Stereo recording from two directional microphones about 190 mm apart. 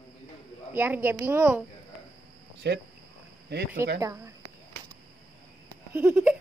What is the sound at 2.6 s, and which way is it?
Speech, 60° right (ahead or behind).